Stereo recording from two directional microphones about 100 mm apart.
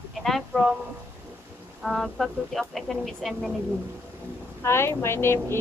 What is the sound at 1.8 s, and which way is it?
Speech, centre (ahead or behind).